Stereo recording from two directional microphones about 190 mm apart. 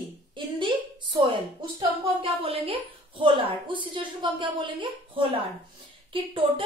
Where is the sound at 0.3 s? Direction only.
25° right (ahead or behind).